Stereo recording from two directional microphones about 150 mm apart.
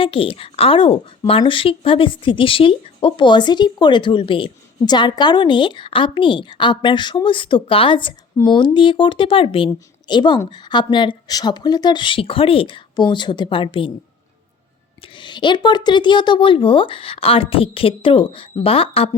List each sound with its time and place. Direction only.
0.0 s a woman's voice: 35° left (ahead or behind)
15.0 s a woman's voice: 30° left (ahead or behind)